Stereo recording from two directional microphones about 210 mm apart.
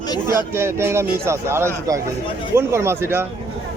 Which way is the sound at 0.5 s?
10° right (ahead or behind).